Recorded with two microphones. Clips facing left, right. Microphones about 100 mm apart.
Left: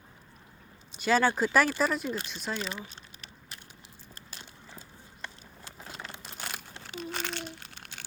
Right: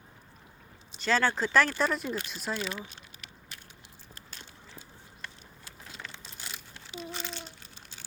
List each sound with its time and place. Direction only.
0.9 s speech: 15° left (ahead or behind)
2.6 s speech: 20° left (ahead or behind)
6.1 s a sound: 60° left (ahead or behind)